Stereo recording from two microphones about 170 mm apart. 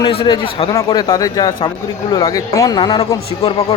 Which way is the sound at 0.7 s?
20° left (ahead or behind).